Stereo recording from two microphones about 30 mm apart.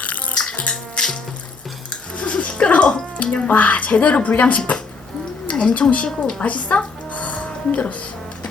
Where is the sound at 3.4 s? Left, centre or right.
Left.